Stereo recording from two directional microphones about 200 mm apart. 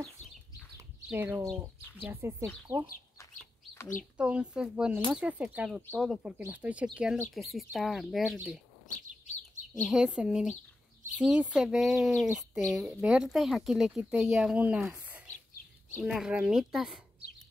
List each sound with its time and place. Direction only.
0.2 s a sound: 35° left (ahead or behind)
0.7 s bird: 10° right (ahead or behind)
2.2 s speech: 10° right (ahead or behind)
4.2 s speech: 5° right (ahead or behind)
9.8 s speech: centre (ahead or behind)